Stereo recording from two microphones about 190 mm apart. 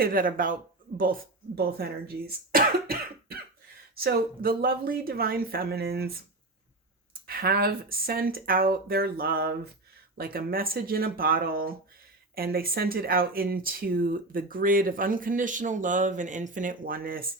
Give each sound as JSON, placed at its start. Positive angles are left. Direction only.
{"t": 0.0, "sound": "speech", "side_deg": -50}
{"t": 7.3, "sound": "speech", "side_deg": -55}